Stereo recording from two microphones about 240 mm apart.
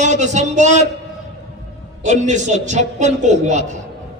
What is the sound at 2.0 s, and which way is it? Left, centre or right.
A man's voice, right.